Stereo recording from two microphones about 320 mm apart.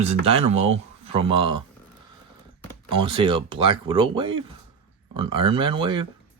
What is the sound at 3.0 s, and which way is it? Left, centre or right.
Speech, centre.